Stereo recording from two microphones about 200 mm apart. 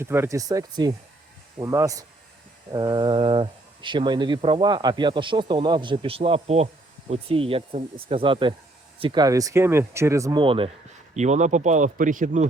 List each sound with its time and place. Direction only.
0.0 s speech: 10° right (ahead or behind); by 12.5 s 40° right (ahead or behind)